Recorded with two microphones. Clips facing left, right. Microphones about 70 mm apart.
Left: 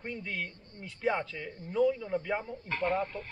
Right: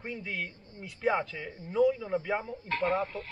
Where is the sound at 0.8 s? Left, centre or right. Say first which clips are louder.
Right 2 dB; centre.